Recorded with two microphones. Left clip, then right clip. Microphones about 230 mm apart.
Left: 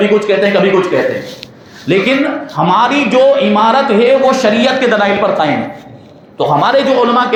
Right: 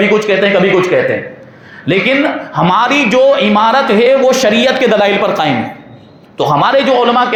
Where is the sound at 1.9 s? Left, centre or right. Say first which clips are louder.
Right 1 dB; right.